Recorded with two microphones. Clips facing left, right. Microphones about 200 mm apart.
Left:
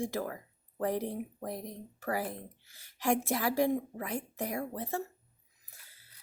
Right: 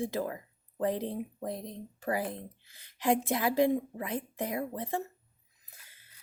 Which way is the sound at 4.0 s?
20° right (ahead or behind).